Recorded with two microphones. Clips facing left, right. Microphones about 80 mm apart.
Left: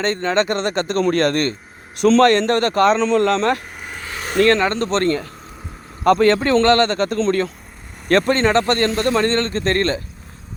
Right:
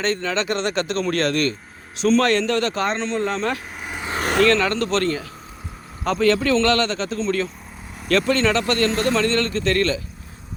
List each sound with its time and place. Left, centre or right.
0.0 s speech: left
2.8 s speech: left
4.2 s a sound: right
4.4 s speech: left
5.0 s speech: left